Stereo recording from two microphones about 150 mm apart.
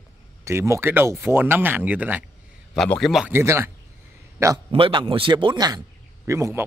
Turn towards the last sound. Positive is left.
turn(degrees=-20)  # may be behind; listen again after turning